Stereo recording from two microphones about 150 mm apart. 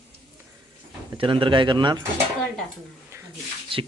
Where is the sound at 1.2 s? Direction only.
35° right (ahead or behind).